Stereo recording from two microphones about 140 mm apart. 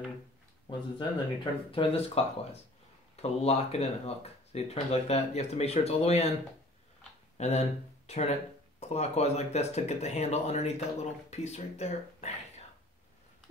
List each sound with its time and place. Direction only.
0.7 s speech: 35° left (ahead or behind)
7.3 s speech: 50° left (ahead or behind)